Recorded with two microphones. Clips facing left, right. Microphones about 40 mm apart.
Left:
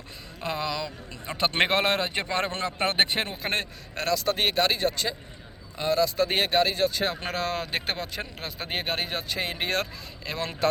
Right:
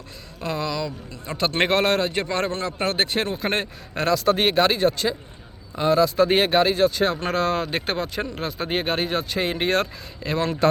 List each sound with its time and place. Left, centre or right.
0.4 s a man's voice: left
3.2 s a man's voice: centre
3.4 s a man's voice: centre